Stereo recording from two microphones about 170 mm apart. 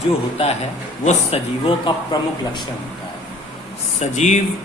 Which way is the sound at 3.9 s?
45° left (ahead or behind).